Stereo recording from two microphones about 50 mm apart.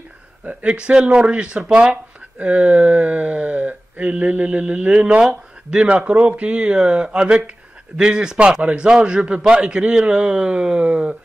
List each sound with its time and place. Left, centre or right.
0.5 s a man's voice: right
0.7 s speech: centre